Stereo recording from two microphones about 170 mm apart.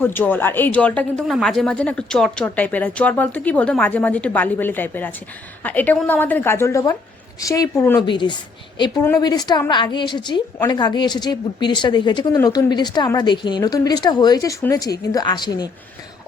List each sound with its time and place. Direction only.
0.0 s a woman's voice: 10° left (ahead or behind)